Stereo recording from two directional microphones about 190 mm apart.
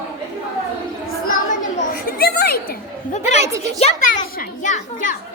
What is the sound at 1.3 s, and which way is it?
A woman's voice, 45° left (ahead or behind).